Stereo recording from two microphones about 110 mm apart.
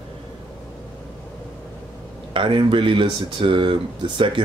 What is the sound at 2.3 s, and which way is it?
Speech, 50° right (ahead or behind).